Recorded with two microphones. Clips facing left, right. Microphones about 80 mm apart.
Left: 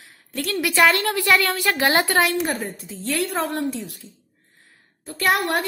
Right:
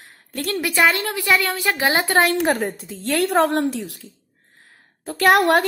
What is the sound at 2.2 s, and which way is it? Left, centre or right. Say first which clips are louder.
A woman's voice: right 4 dB; right.